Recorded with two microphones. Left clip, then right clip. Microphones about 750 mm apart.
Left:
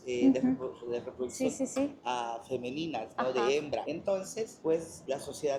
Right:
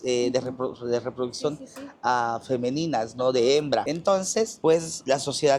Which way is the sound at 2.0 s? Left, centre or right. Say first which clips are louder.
Right 10 dB; right.